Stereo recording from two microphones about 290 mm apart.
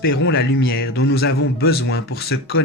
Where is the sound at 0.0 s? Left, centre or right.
Left.